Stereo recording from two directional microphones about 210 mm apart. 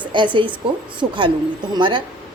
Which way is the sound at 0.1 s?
20° right (ahead or behind).